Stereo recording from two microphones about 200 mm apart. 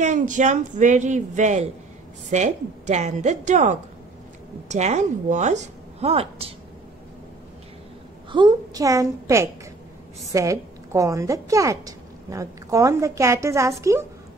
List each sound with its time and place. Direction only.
0.0 s a woman's voice: 35° right (ahead or behind)
8.3 s a woman's voice: 20° right (ahead or behind)